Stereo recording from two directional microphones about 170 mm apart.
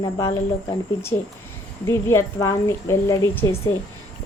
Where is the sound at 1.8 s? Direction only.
15° left (ahead or behind).